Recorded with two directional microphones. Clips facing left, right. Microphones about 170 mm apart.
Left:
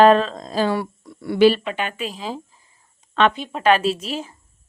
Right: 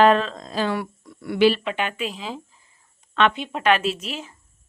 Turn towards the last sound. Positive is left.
turn(degrees=35)  # may be behind; listen again after turning